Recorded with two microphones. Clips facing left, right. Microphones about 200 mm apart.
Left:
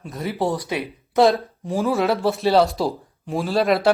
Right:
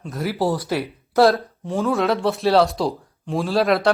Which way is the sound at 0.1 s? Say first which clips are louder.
Right 1 dB; centre (ahead or behind).